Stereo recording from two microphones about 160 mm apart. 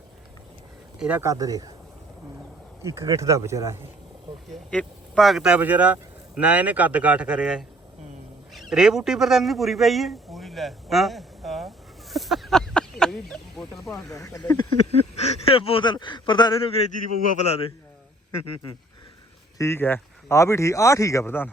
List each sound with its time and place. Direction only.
0.9 s speech: 5° right (ahead or behind)
1.2 s speech: 20° right (ahead or behind)
2.8 s speech: 20° right (ahead or behind)
4.7 s a man's voice: 5° left (ahead or behind)
12.1 s a sound: centre (ahead or behind)
13.7 s speech: centre (ahead or behind)
14.3 s speech: 25° left (ahead or behind)
14.9 s a man's voice: 40° left (ahead or behind)
19.5 s speech: 15° left (ahead or behind)